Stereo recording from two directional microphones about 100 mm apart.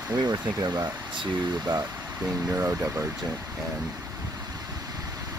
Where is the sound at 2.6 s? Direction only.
25° right (ahead or behind).